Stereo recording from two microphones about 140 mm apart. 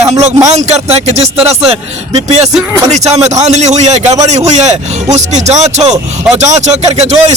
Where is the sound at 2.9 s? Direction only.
50° right (ahead or behind).